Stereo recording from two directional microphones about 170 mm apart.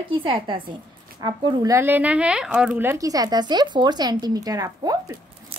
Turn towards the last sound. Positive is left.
turn(degrees=-20)  # may be behind; listen again after turning